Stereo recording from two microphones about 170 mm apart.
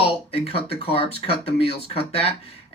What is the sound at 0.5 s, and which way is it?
Speech, 35° left (ahead or behind).